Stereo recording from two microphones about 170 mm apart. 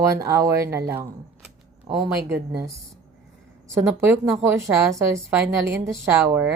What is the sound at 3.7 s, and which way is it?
A woman's voice, 15° right (ahead or behind).